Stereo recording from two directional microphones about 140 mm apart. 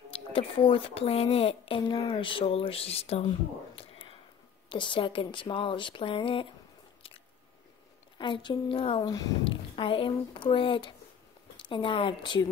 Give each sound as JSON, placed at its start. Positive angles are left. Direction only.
{"t": 0.1, "sound": "a woman's voice", "side_deg": 40}
{"t": 8.2, "sound": "speech", "side_deg": 35}